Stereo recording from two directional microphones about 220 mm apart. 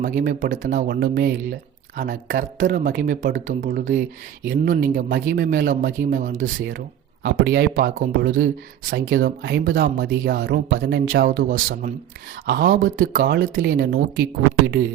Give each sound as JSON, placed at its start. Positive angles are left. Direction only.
{"t": 0.0, "sound": "speech", "side_deg": -35}